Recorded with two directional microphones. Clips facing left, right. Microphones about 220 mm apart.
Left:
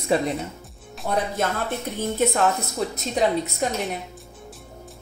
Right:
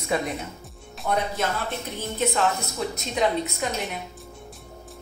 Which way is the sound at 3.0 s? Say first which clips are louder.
Left 2 dB; 40° left (ahead or behind).